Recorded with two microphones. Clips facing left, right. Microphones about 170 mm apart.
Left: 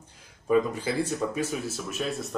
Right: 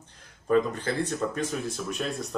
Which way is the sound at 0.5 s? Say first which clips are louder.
Even; 10° left (ahead or behind).